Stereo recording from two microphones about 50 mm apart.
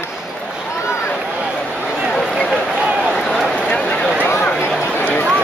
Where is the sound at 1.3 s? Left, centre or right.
Centre.